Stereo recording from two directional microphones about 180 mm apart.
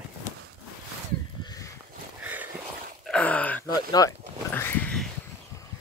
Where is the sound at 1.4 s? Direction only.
20° left (ahead or behind).